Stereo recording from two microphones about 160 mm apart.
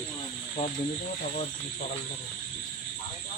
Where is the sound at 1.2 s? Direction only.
50° left (ahead or behind).